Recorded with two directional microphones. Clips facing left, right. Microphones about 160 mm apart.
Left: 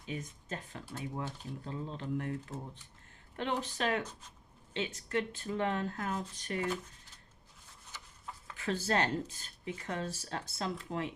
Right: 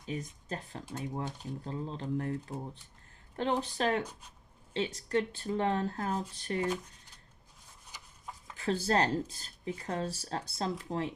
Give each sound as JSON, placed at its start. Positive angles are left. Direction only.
{"t": 0.0, "sound": "speech", "side_deg": -35}
{"t": 7.9, "sound": "a sound", "side_deg": -15}
{"t": 8.5, "sound": "speech", "side_deg": -35}